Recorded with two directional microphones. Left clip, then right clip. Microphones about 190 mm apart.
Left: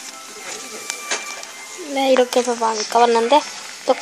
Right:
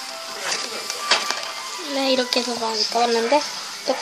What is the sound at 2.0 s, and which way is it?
Speech, 15° left (ahead or behind).